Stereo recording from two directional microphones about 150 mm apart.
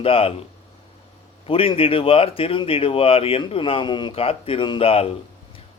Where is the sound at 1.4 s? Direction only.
35° left (ahead or behind).